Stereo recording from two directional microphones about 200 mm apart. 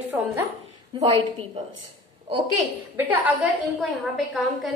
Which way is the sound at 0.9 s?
25° right (ahead or behind).